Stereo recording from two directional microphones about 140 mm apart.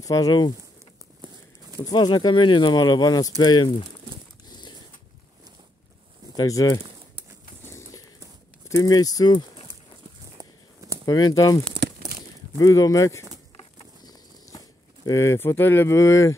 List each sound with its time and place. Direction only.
0.0 s speech: 25° left (ahead or behind)
1.8 s speech: 30° left (ahead or behind)
4.5 s a sound: 30° left (ahead or behind)
6.3 s speech: 25° left (ahead or behind)
8.6 s speech: 25° left (ahead or behind)
10.4 s a sound: 25° right (ahead or behind)
11.1 s speech: 30° left (ahead or behind)
15.0 s speech: 20° left (ahead or behind)